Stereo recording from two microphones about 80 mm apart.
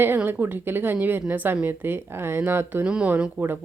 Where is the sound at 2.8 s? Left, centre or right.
Centre.